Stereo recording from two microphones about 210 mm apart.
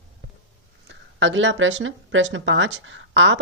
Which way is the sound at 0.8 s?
60° right (ahead or behind).